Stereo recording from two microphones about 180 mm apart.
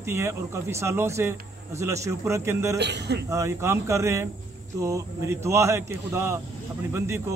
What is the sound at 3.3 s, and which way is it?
Speech, 15° right (ahead or behind).